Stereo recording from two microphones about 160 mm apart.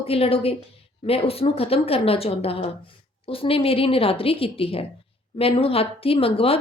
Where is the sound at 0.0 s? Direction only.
35° left (ahead or behind).